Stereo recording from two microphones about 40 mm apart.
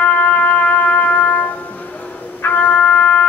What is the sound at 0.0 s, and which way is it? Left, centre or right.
Music, left.